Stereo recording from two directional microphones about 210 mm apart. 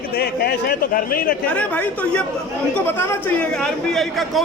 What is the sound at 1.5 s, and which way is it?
A man's voice, 5° left (ahead or behind).